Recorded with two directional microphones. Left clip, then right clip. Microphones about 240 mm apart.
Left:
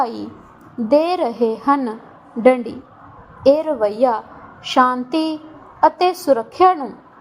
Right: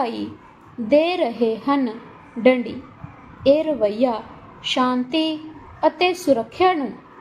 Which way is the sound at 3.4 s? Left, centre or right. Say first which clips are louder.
Left 2 dB; centre.